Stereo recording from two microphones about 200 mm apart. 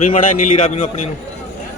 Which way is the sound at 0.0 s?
40° left (ahead or behind).